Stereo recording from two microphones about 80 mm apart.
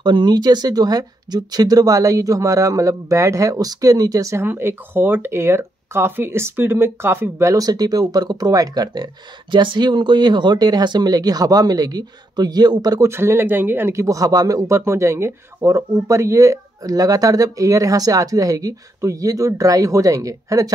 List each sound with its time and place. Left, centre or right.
0.0 s speech: right
4.4 s speech: right
7.5 s speech: right
13.0 s speech: right
14.0 s speech: right
14.9 s speech: right